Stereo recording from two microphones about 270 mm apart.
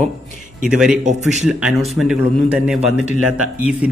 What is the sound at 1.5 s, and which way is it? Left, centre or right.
A man's voice, centre.